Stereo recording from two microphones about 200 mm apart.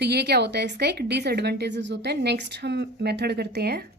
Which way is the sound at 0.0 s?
55° right (ahead or behind).